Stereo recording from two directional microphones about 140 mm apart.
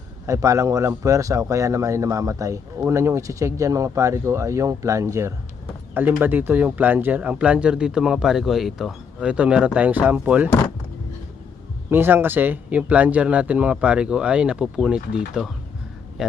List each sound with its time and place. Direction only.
0.3 s speech: 20° right (ahead or behind)
11.9 s speech: 15° right (ahead or behind)